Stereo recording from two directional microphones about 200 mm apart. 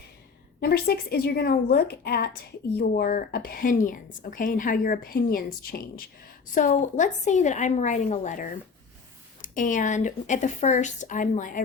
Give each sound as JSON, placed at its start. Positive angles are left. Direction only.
{"t": 0.6, "sound": "a woman's voice", "side_deg": 50}